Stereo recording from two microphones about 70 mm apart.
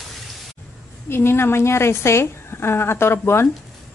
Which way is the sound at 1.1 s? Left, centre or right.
Left.